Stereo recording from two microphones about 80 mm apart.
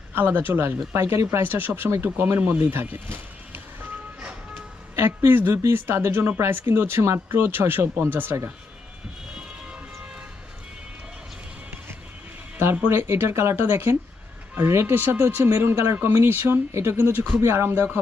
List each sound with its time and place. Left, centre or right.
0.1 s a woman's voice: right
4.9 s a woman's voice: right
12.9 s a woman's voice: right